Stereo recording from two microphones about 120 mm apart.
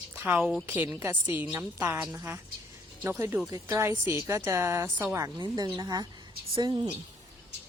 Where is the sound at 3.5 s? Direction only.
30° right (ahead or behind).